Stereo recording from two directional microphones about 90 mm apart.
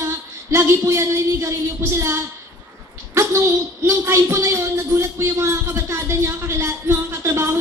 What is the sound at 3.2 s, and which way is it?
A man's voice, 30° right (ahead or behind).